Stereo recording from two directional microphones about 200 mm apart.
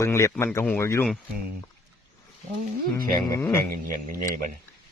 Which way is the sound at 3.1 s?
15° left (ahead or behind).